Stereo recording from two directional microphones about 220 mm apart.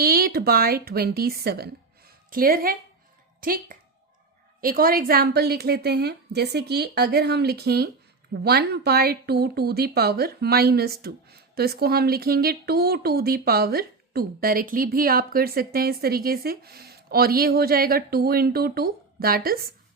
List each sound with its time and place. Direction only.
0.0 s a woman's voice: 45° right (ahead or behind)